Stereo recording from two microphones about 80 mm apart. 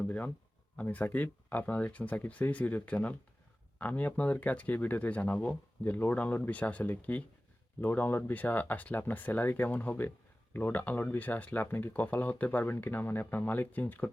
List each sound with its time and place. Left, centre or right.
0.0 s speech: left